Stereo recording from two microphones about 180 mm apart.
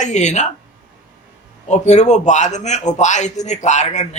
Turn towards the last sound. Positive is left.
turn(degrees=40)  # may be behind; listen again after turning